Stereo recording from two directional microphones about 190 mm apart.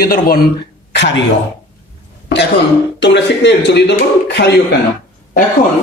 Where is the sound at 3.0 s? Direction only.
65° left (ahead or behind).